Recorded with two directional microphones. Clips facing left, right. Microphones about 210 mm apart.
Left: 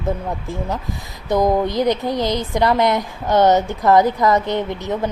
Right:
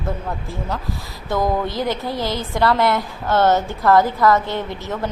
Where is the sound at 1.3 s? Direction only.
20° left (ahead or behind).